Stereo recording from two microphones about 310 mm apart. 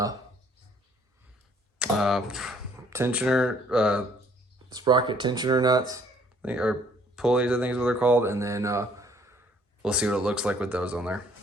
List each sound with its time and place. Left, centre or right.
1.8 s speech: centre
4.7 s speech: centre